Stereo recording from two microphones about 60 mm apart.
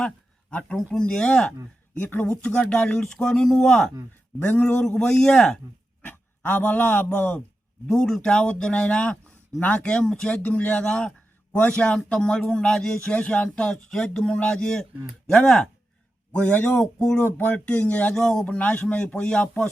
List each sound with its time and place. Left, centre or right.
0.8 s speech: centre
1.0 s speech: centre
2.0 s speech: left
2.4 s speech: centre
6.0 s speech: left
7.9 s speech: centre
10.4 s speech: left; by 13.0 s centre
13.1 s speech: centre
16.3 s speech: left
16.7 s speech: centre
17.2 s speech: left
18.1 s speech: centre
18.4 s speech: left